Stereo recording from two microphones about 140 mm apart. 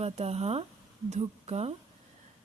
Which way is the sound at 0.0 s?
50° right (ahead or behind).